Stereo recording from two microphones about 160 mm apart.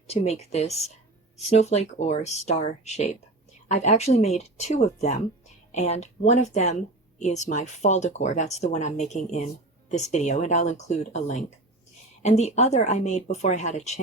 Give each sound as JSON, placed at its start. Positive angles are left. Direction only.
{"t": 0.1, "sound": "speech", "side_deg": 40}